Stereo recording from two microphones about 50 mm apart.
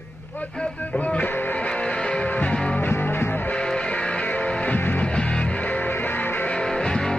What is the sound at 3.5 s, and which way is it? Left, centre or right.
Music, centre.